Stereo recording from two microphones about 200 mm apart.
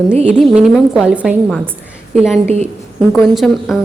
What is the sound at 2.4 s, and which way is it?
Speech, 30° right (ahead or behind).